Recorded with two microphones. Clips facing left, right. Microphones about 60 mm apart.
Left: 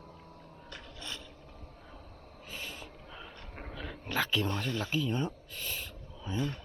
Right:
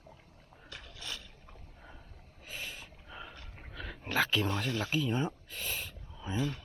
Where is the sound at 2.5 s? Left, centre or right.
Centre.